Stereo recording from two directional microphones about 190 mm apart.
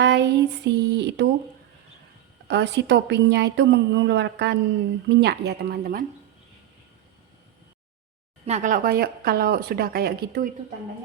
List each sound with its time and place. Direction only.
0.0 s a woman's voice: 65° right (ahead or behind)
2.5 s a woman's voice: 65° right (ahead or behind)
8.4 s speech: 40° right (ahead or behind)